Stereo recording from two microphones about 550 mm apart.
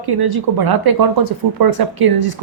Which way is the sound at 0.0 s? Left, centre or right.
Right.